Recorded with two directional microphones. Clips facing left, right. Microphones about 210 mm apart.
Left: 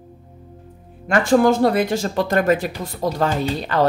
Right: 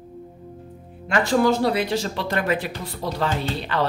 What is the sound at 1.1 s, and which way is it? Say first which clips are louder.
Speech: left 4 dB; 50° left (ahead or behind).